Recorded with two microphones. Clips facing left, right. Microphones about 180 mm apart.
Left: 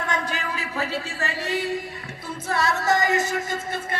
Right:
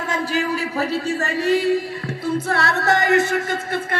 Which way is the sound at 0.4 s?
40° right (ahead or behind).